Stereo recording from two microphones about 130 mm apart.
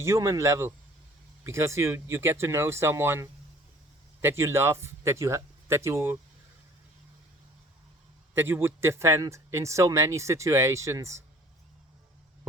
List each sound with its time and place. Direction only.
0.0 s speech: 20° right (ahead or behind)
8.4 s speech: 15° right (ahead or behind)